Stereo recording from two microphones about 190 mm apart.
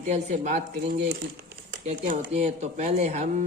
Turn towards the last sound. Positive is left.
turn(degrees=-35)  # may be behind; listen again after turning